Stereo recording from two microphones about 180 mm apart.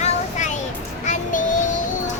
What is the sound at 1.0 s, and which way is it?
Child singing, 45° left (ahead or behind).